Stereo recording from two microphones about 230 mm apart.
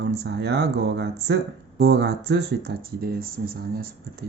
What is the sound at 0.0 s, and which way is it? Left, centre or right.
Speech, right.